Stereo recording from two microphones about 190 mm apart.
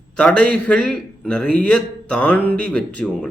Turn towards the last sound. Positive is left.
turn(degrees=5)  # may be behind; listen again after turning